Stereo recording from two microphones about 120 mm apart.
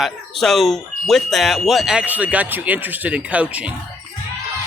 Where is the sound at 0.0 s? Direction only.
Centre (ahead or behind).